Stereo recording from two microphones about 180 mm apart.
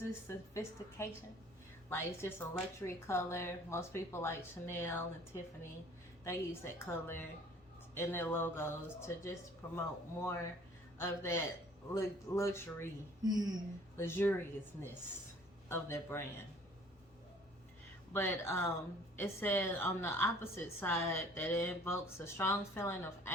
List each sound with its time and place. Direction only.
0.3 s a woman's voice: 15° left (ahead or behind)
13.2 s speech: 20° right (ahead or behind)
13.9 s a woman's voice: 10° left (ahead or behind)
18.1 s a woman's voice: 15° left (ahead or behind)